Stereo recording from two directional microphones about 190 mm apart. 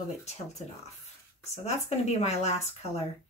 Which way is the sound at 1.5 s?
35° left (ahead or behind).